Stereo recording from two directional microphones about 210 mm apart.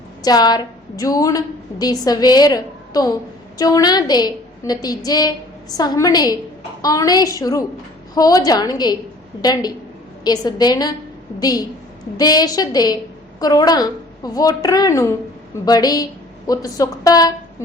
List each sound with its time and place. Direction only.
0.2 s a woman's voice: 20° left (ahead or behind)